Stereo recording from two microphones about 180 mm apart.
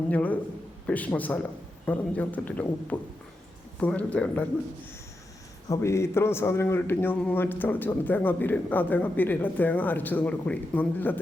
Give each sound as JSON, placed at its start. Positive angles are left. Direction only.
{"t": 0.1, "sound": "a man's voice", "side_deg": 10}
{"t": 5.6, "sound": "a man's voice", "side_deg": 15}